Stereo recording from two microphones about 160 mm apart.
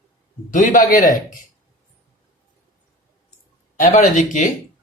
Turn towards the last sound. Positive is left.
turn(degrees=55)  # may be behind; listen again after turning